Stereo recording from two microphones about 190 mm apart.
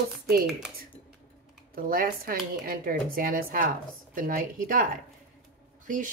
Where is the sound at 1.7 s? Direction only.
50° right (ahead or behind).